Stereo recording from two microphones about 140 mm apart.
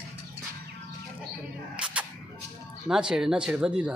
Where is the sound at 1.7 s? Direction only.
5° right (ahead or behind).